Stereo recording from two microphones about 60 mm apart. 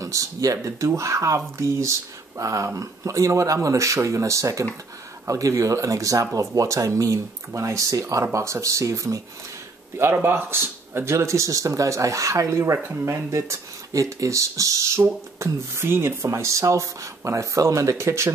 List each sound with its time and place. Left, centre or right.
0.0 s speech: right
9.9 s speech: right
12.7 s speech: right
15.3 s speech: right